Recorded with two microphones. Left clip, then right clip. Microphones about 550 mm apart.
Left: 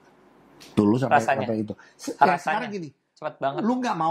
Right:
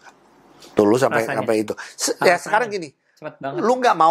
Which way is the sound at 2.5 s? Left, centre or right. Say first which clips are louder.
Right 9 dB; right.